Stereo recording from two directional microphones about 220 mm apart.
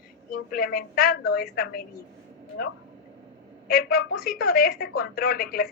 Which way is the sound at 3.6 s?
45° left (ahead or behind).